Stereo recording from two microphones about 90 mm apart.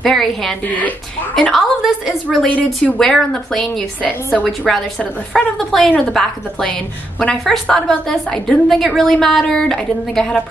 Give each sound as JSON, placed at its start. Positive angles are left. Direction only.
{"t": 0.0, "sound": "a woman's voice", "side_deg": 5}
{"t": 0.7, "sound": "a woman's voice", "side_deg": 20}
{"t": 1.3, "sound": "a woman's voice", "side_deg": 5}
{"t": 2.4, "sound": "a woman's voice", "side_deg": 15}